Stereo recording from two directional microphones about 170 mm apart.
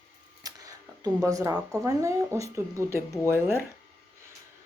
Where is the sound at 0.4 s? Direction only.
20° right (ahead or behind).